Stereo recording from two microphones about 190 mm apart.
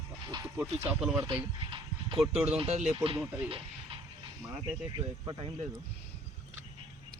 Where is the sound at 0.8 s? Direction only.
5° right (ahead or behind).